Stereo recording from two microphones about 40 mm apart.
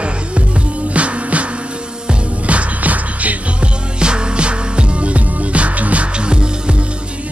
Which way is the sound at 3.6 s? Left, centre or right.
Right.